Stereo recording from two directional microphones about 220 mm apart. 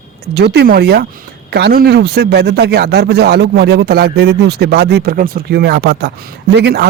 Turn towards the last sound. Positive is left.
turn(degrees=-50)  # may be behind; listen again after turning